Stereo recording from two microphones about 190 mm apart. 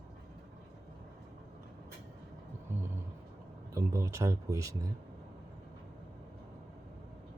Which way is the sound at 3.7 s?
15° right (ahead or behind).